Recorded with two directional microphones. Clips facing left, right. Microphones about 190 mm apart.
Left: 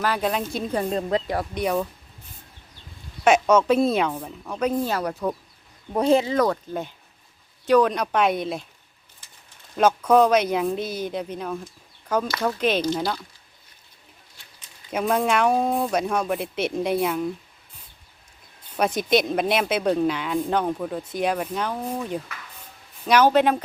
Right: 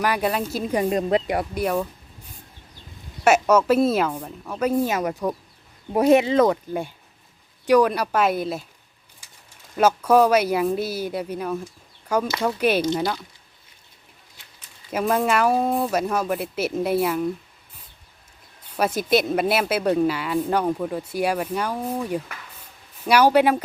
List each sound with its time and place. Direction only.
0.0 s a woman's voice: 10° right (ahead or behind)
3.2 s a woman's voice: 5° right (ahead or behind)
6.3 s speech: 20° right (ahead or behind)
7.7 s a woman's voice: 10° right (ahead or behind)
9.7 s speech: 5° right (ahead or behind)
13.0 s a woman's voice: centre (ahead or behind)
14.8 s a woman's voice: 5° right (ahead or behind)
18.8 s a woman's voice: 5° right (ahead or behind)